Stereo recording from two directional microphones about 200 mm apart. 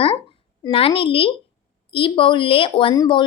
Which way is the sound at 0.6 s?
25° left (ahead or behind).